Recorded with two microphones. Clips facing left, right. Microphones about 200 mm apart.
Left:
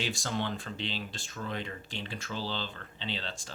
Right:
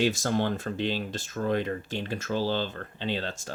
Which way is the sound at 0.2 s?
50° right (ahead or behind).